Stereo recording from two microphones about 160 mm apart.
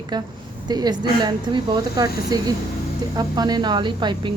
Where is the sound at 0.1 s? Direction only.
25° right (ahead or behind).